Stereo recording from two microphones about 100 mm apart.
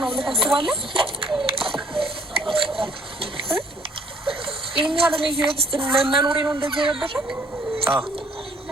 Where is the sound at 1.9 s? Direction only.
65° right (ahead or behind).